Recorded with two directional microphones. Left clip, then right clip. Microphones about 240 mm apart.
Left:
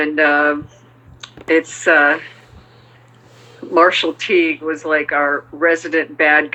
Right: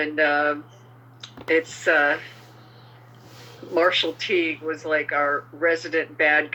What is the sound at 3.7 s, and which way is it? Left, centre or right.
Speech, centre.